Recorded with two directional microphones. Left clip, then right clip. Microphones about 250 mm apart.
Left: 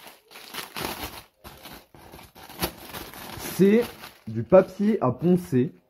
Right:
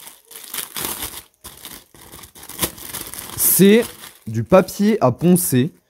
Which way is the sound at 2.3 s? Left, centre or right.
Centre.